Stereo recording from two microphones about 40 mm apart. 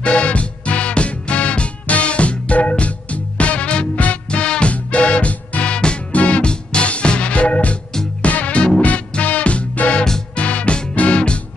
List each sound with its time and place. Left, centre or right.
0.0 s music: left